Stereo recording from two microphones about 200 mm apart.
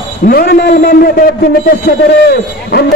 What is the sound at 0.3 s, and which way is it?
A man's voice, 50° left (ahead or behind).